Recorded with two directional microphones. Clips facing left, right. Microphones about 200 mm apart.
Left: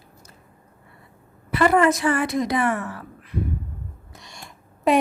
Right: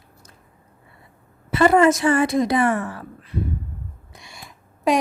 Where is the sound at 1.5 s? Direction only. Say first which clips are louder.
Right 3 dB; 25° right (ahead or behind).